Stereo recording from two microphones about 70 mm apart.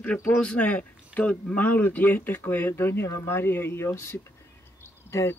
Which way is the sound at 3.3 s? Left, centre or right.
Left.